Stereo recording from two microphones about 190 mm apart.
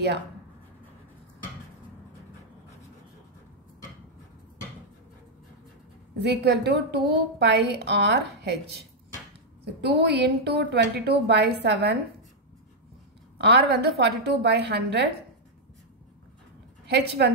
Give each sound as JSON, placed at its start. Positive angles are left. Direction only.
{"t": 6.2, "sound": "a woman's voice", "side_deg": -60}
{"t": 13.4, "sound": "a woman's voice", "side_deg": -60}
{"t": 16.8, "sound": "a woman's voice", "side_deg": -60}